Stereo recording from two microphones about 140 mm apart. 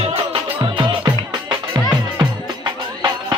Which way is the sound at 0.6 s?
35° right (ahead or behind).